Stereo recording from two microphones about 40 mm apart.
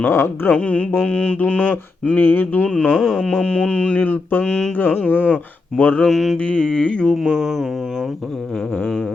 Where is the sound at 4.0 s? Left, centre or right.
Left.